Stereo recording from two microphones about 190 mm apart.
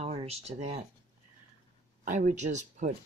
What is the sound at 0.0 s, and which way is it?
Speech, 30° right (ahead or behind).